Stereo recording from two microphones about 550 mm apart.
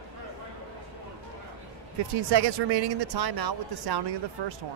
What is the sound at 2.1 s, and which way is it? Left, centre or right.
Speech, right.